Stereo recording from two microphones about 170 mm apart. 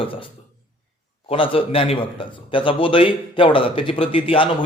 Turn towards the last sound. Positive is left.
turn(degrees=30)  # may be behind; listen again after turning